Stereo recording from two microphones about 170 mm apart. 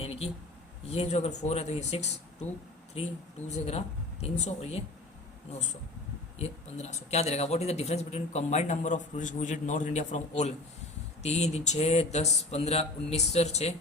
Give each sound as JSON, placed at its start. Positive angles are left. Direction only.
{"t": 0.0, "sound": "a sound", "side_deg": 35}
{"t": 0.9, "sound": "a man's voice", "side_deg": 40}
{"t": 3.5, "sound": "a man's voice", "side_deg": 40}
{"t": 6.4, "sound": "a man's voice", "side_deg": 40}